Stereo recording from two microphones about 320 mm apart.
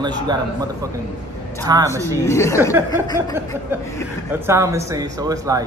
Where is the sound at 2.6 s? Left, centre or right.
Centre.